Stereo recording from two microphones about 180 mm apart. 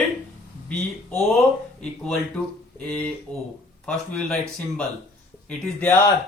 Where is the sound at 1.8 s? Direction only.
5° left (ahead or behind).